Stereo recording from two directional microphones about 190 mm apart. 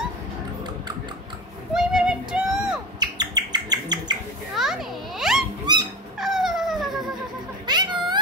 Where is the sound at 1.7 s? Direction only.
5° right (ahead or behind).